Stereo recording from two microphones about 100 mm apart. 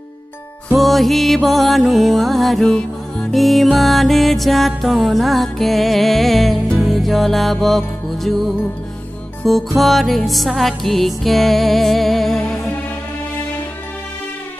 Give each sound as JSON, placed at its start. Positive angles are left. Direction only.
{"t": 0.7, "sound": "music", "side_deg": 0}
{"t": 9.4, "sound": "music", "side_deg": 0}